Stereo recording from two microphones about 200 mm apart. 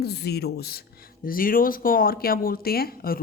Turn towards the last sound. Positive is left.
turn(degrees=50)  # may be behind; listen again after turning